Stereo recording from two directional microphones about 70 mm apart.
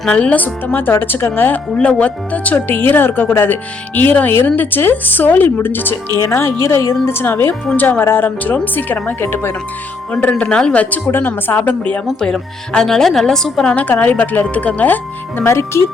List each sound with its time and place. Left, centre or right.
0.1 s speech: centre
6.1 s speech: left
10.1 s speech: centre
12.2 s speech: centre
14.0 s speech: left